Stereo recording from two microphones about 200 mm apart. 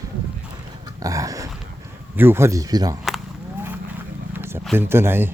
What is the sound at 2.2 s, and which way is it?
Speech, 10° right (ahead or behind).